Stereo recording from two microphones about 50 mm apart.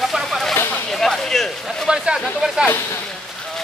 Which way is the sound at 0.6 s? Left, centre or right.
Left.